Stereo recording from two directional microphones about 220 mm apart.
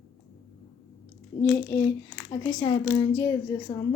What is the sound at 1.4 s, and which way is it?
Speech, 5° left (ahead or behind).